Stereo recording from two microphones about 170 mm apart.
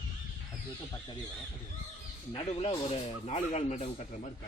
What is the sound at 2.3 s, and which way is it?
Speech, 35° left (ahead or behind).